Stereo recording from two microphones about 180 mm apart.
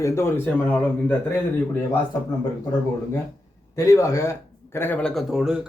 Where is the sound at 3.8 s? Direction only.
20° left (ahead or behind); by 5.6 s 5° right (ahead or behind).